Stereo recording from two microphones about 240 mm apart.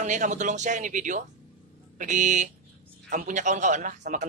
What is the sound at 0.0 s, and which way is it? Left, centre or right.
Speech, right.